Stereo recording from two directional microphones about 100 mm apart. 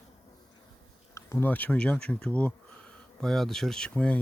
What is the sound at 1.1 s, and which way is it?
Speech, 25° left (ahead or behind).